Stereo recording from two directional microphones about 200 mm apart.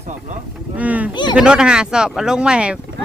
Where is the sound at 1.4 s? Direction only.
5° right (ahead or behind).